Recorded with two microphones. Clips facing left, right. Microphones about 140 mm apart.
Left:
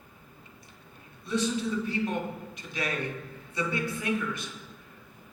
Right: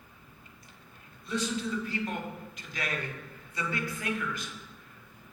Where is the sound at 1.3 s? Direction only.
25° left (ahead or behind).